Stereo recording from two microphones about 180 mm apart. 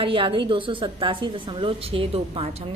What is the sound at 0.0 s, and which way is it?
A woman's voice, 30° right (ahead or behind).